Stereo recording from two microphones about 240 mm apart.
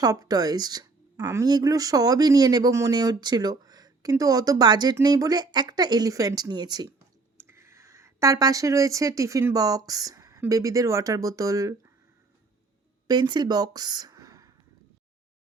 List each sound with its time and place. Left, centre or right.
0.0 s speech: centre
13.1 s speech: centre